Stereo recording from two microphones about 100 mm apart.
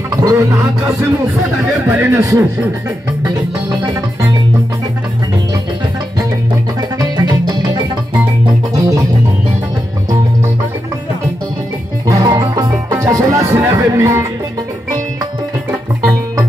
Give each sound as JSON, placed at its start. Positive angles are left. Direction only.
{"t": 0.1, "sound": "music", "side_deg": -35}
{"t": 1.9, "sound": "speech", "side_deg": -25}
{"t": 7.0, "sound": "music", "side_deg": -40}
{"t": 12.1, "sound": "music", "side_deg": -40}
{"t": 12.7, "sound": "music", "side_deg": -30}